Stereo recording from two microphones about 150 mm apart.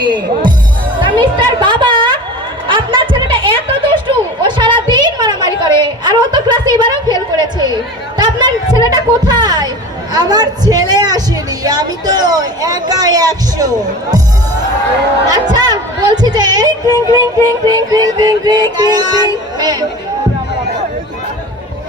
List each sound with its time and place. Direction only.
0.0 s music: 30° right (ahead or behind)
0.9 s a sound: 30° right (ahead or behind)
7.3 s music: 30° right (ahead or behind)
8.2 s a woman's voice: 30° right (ahead or behind)
8.9 s music: 30° right (ahead or behind)
15.3 s music: 25° right (ahead or behind)